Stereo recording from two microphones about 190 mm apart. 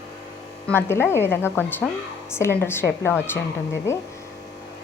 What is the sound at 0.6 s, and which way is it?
A woman's voice, 10° left (ahead or behind).